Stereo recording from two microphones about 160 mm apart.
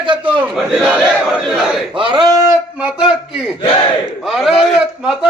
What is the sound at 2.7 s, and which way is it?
Speech, 5° right (ahead or behind).